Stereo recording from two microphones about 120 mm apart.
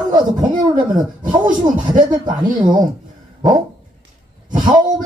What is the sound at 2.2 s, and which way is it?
Speech, 35° right (ahead or behind).